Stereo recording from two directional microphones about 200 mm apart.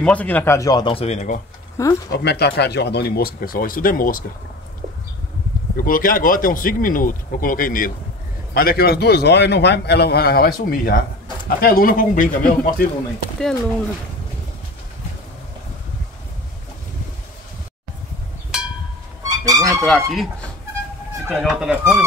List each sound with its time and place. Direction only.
0.0 s speech: 5° left (ahead or behind); by 1.4 s 35° left (ahead or behind)
2.0 s a man's voice: 55° left (ahead or behind)
5.8 s a man's voice: 45° left (ahead or behind)
13.4 s speech: 5° left (ahead or behind)
18.5 s a sound: 5° right (ahead or behind)
19.2 s music: 15° right (ahead or behind)
19.8 s speech: centre (ahead or behind)